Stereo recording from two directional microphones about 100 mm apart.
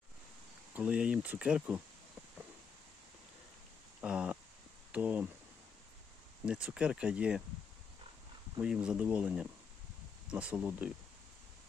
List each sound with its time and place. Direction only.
0.8 s speech: 10° right (ahead or behind)
4.0 s a sound: 10° right (ahead or behind)
4.9 s speech: 15° right (ahead or behind)
6.4 s speech: 10° right (ahead or behind)
8.6 s speech: 10° right (ahead or behind)